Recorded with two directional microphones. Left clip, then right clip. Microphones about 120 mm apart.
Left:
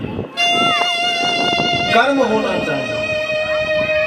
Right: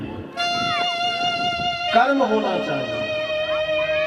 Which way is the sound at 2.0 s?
20° left (ahead or behind).